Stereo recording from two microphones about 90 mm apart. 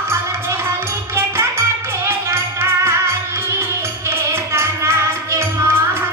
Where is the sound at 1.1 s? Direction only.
30° right (ahead or behind).